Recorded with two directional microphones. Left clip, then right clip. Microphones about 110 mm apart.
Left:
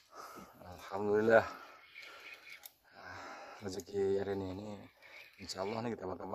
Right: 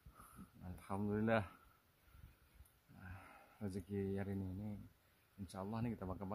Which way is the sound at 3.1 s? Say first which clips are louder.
Left 16 dB; 25° right (ahead or behind).